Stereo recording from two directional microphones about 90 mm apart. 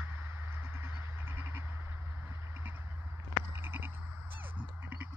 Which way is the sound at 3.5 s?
25° right (ahead or behind).